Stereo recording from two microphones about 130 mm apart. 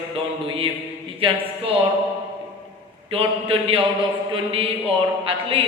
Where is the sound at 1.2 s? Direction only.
50° right (ahead or behind).